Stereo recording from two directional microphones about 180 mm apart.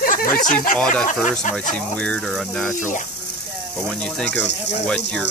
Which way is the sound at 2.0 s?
5° left (ahead or behind).